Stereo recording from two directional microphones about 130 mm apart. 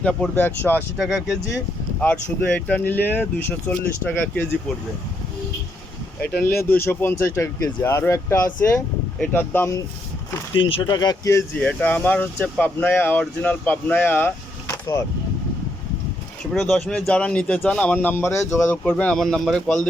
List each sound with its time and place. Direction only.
0.0 s a man's voice: 10° left (ahead or behind)
0.9 s speech: centre (ahead or behind)
2.0 s a man's voice: 10° left (ahead or behind)
6.7 s a man's voice: 20° left (ahead or behind)
10.5 s speech: 40° left (ahead or behind)
10.8 s speech: 30° left (ahead or behind)
11.5 s a man's voice: 10° left (ahead or behind)
16.6 s a man's voice: 5° left (ahead or behind)